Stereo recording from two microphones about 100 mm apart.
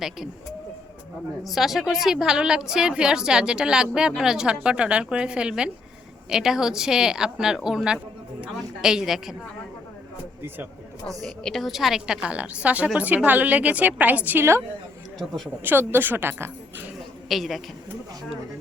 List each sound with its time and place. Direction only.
1.5 s a woman's voice: centre (ahead or behind)
11.0 s a woman's voice: 5° left (ahead or behind); by 14.6 s 20° right (ahead or behind)
15.6 s speech: 20° right (ahead or behind)
17.2 s a man's voice: centre (ahead or behind)